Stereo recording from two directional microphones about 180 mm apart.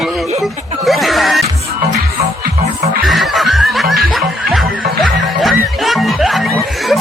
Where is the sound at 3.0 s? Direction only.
Centre (ahead or behind).